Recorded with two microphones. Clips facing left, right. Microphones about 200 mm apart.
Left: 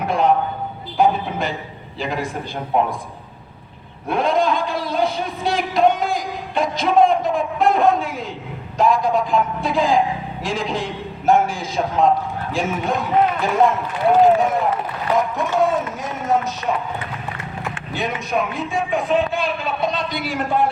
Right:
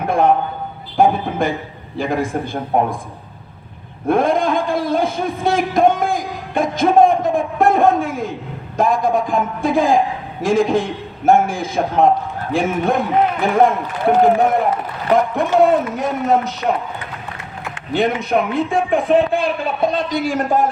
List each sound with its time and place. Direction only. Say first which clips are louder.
0.1 s a sound: right 3 dB; 55° right (ahead or behind)
0.9 s a man's voice: right 3 dB; 50° right (ahead or behind)
4.1 s a man's voice: right 3 dB; 50° right (ahead or behind)
17.9 s a man's voice: right 6 dB; 60° right (ahead or behind)